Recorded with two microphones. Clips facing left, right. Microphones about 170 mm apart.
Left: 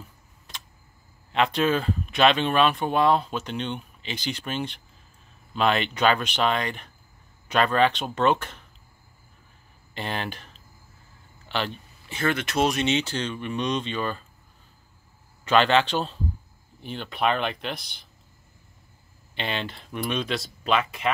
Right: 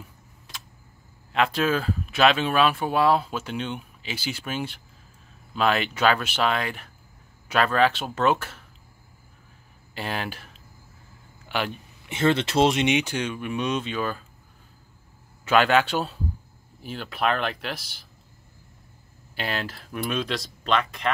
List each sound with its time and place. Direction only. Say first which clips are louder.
1.3 s speech: left 1 dB; centre (ahead or behind)
9.9 s speech: even; 5° right (ahead or behind)
12.1 s speech: right 4 dB; 25° right (ahead or behind)
12.8 s speech: right 2 dB; 15° right (ahead or behind)
15.4 s speech: even; 5° right (ahead or behind)
19.3 s speech: even; 5° right (ahead or behind)